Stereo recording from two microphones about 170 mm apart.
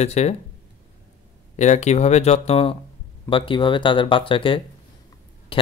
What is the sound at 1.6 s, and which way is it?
Speech, 40° left (ahead or behind).